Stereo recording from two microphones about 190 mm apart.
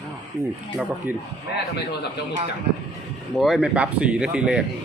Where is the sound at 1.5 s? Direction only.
60° left (ahead or behind).